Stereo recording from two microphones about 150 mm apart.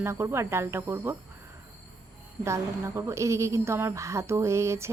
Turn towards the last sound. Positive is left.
turn(degrees=-20)  # may be behind; listen again after turning